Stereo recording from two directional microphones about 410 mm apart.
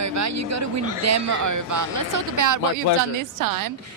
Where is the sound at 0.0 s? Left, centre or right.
Right.